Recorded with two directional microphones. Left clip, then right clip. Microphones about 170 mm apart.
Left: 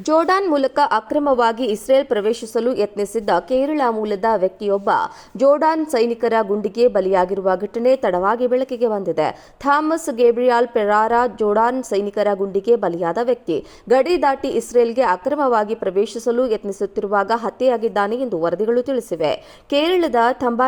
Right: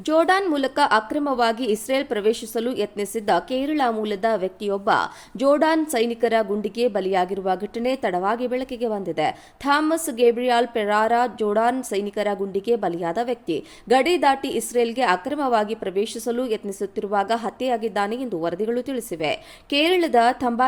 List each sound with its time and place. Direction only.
0.0 s speech: 25° right (ahead or behind)
0.3 s a woman's voice: 10° right (ahead or behind)